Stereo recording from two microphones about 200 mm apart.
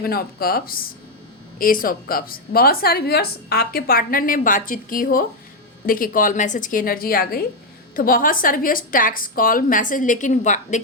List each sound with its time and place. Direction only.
0.0 s a woman's voice: 50° left (ahead or behind)